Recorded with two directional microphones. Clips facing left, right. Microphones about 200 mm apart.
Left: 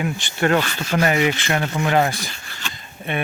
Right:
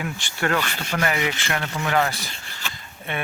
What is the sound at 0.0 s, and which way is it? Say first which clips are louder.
Speech: left 5 dB; 20° left (ahead or behind).